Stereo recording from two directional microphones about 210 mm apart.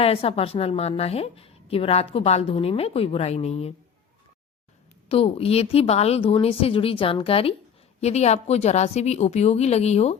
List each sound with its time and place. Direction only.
0.0 s a woman's voice: 30° left (ahead or behind)
5.0 s a woman's voice: 25° left (ahead or behind)